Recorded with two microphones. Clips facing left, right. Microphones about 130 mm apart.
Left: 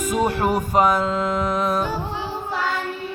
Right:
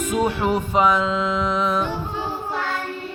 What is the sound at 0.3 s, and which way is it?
Music, 40° left (ahead or behind).